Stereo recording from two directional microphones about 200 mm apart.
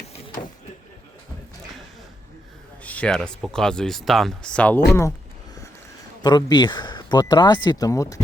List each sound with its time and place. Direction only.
2.8 s speech: 5° left (ahead or behind)
6.2 s speech: 20° left (ahead or behind)